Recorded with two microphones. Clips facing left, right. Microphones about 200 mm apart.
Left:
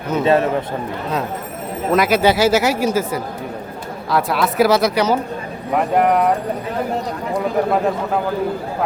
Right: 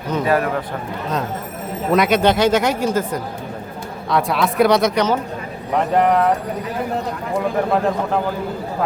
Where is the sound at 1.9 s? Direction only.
5° left (ahead or behind).